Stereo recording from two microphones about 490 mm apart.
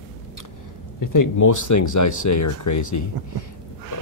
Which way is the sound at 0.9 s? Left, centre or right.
Left.